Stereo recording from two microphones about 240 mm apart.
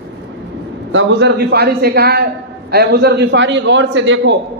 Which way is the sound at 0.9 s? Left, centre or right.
Right.